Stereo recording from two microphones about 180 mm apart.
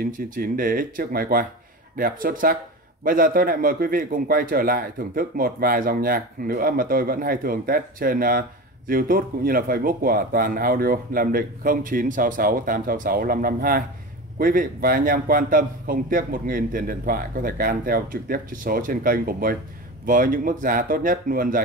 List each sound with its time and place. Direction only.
0.3 s a man's voice: 50° right (ahead or behind)